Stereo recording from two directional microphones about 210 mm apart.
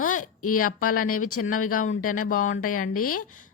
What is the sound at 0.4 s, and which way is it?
Speech, 90° left.